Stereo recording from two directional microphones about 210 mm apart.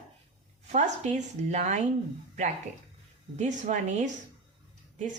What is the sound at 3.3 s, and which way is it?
Speech, 35° right (ahead or behind).